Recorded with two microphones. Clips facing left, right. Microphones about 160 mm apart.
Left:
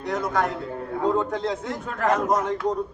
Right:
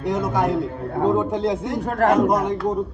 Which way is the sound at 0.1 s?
10° right (ahead or behind).